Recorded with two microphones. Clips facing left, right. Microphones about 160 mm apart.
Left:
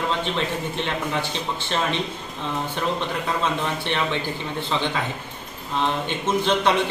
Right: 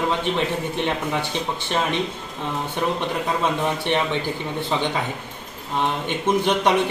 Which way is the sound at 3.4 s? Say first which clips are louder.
Right 2 dB; 15° right (ahead or behind).